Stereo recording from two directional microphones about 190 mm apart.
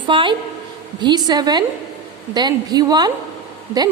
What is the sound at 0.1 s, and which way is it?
A woman's voice, 25° right (ahead or behind).